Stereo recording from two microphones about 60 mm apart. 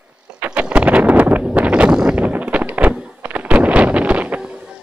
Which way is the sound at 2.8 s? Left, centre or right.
Right.